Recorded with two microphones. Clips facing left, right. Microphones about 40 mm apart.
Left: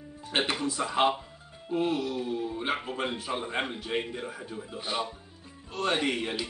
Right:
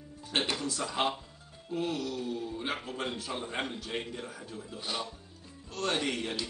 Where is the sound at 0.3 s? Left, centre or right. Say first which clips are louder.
Left 3 dB; left.